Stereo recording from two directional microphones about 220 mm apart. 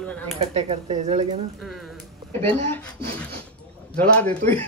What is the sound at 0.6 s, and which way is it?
Speech, 30° right (ahead or behind).